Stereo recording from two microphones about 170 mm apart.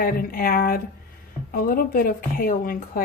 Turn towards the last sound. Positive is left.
turn(degrees=55)  # may be behind; listen again after turning